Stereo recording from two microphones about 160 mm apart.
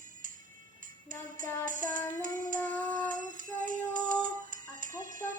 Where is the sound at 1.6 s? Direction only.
55° right (ahead or behind).